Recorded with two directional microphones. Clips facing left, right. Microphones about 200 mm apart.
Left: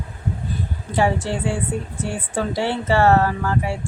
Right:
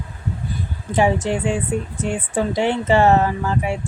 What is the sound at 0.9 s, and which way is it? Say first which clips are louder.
A woman's voice: right 2 dB; 20° right (ahead or behind).